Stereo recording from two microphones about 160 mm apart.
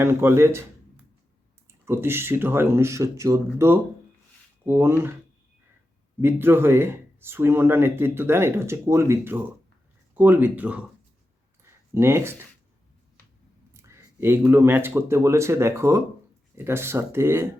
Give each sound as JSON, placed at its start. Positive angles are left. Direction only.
{"t": 0.0, "sound": "speech", "side_deg": -15}
{"t": 1.8, "sound": "speech", "side_deg": -15}
{"t": 6.2, "sound": "speech", "side_deg": -15}
{"t": 11.9, "sound": "speech", "side_deg": -15}
{"t": 13.7, "sound": "speech", "side_deg": -15}